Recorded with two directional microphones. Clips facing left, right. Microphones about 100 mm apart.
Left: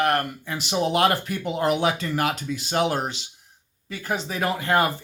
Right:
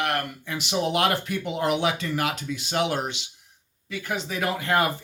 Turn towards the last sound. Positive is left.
turn(degrees=30)  # may be behind; listen again after turning